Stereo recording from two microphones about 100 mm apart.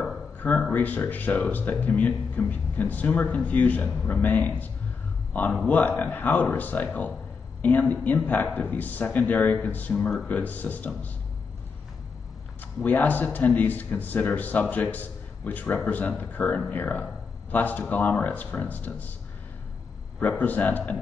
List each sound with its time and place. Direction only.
0.4 s speech: 15° left (ahead or behind)
12.8 s speech: 15° left (ahead or behind)
20.2 s speech: 15° left (ahead or behind)